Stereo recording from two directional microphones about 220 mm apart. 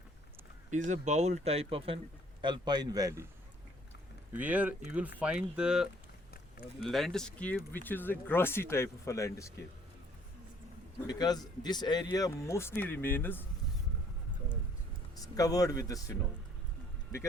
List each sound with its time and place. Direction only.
0.7 s a man's voice: 35° right (ahead or behind); by 3.2 s 15° right (ahead or behind)
4.3 s speech: 5° right (ahead or behind); by 9.6 s 15° left (ahead or behind)
11.0 s speech: 20° left (ahead or behind)
15.1 s speech: 15° left (ahead or behind)